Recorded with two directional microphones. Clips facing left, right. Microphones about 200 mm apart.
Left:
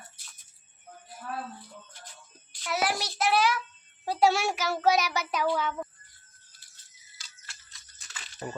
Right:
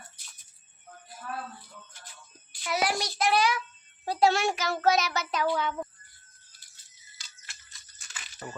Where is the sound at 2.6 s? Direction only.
Centre (ahead or behind).